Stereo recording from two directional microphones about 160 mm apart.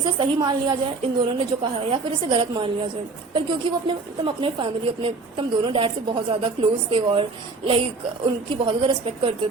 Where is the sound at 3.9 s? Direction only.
30° right (ahead or behind).